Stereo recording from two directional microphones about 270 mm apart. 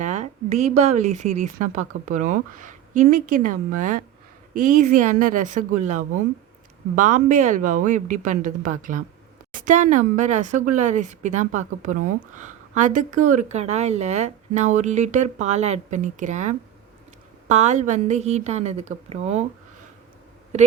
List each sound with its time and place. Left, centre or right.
0.0 s a woman's voice: right